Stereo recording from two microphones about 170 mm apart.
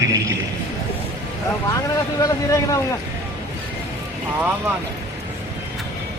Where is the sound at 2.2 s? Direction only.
20° left (ahead or behind).